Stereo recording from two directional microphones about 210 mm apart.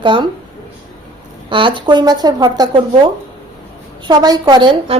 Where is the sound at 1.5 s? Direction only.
25° right (ahead or behind).